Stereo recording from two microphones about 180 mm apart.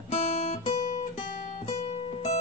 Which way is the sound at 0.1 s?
35° left (ahead or behind).